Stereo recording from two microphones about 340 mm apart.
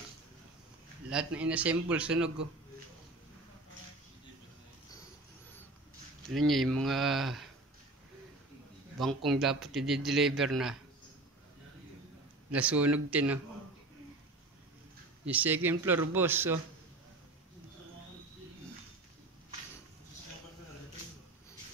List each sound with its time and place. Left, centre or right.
1.1 s speech: centre
6.3 s speech: centre
8.9 s speech: centre
12.4 s speech: centre
15.2 s speech: centre